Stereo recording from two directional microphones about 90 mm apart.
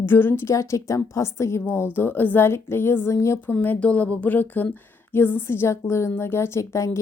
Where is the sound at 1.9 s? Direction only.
20° left (ahead or behind).